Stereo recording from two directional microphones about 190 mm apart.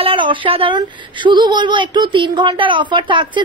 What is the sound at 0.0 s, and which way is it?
Speech, 25° right (ahead or behind).